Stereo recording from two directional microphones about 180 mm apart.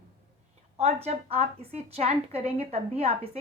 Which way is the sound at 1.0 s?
35° right (ahead or behind).